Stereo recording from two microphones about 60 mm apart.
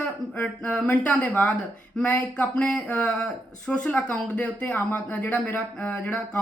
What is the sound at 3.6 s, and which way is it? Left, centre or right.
Speech, left.